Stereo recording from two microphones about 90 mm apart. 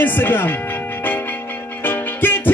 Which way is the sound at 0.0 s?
20° left (ahead or behind).